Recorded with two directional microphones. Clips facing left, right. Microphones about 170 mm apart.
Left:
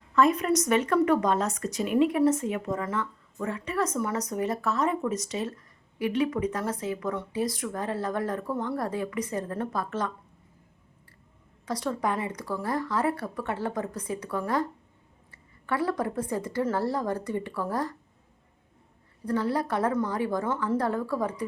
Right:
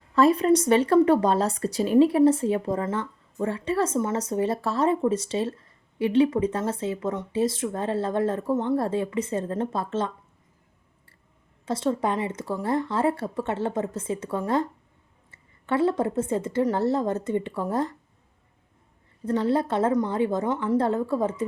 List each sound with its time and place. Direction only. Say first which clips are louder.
0.1 s a woman's voice: right 4 dB; 30° right (ahead or behind)
11.6 s a woman's voice: right 4 dB; 25° right (ahead or behind)
19.2 s a woman's voice: right 4 dB; 25° right (ahead or behind)